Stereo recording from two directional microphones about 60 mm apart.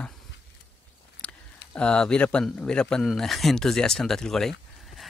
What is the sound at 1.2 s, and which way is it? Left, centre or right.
Speech, centre.